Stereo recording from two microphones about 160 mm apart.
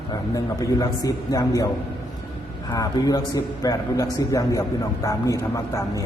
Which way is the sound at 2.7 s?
25° left (ahead or behind).